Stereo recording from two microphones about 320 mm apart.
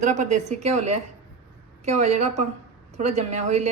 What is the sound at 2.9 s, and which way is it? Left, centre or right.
Speech, right.